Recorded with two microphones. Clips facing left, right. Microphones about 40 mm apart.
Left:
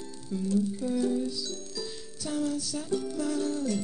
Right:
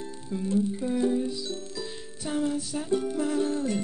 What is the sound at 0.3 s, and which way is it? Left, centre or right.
Music, right.